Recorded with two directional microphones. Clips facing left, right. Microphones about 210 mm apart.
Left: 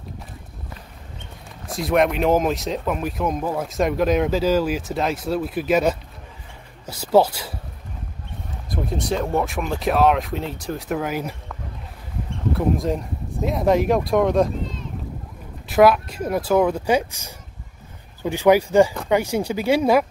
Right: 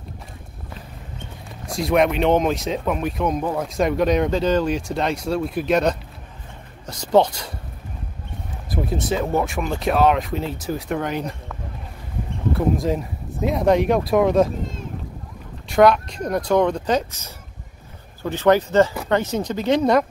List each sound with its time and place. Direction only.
1.7 s speech: centre (ahead or behind)
8.6 s speech: 5° right (ahead or behind)
12.5 s speech: centre (ahead or behind)
15.7 s speech: 5° left (ahead or behind)